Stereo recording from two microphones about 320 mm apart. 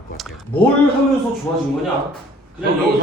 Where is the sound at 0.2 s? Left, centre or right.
Centre.